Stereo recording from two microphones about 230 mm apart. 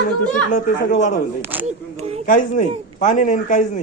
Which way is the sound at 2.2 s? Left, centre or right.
Left.